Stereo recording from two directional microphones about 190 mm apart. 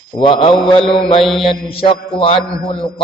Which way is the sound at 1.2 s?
Centre (ahead or behind).